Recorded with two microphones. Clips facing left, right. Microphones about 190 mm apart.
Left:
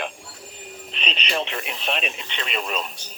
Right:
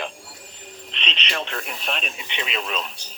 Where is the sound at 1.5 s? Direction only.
5° left (ahead or behind).